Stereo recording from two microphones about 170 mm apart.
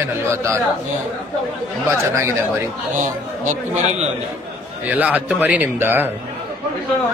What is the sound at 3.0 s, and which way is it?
A man's voice, 45° right (ahead or behind).